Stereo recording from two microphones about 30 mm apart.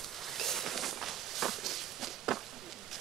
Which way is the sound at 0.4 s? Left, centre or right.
Centre.